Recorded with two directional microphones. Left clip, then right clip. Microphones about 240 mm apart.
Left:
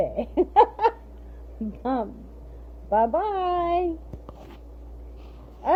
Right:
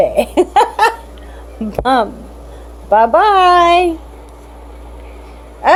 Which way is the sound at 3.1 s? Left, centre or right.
Centre.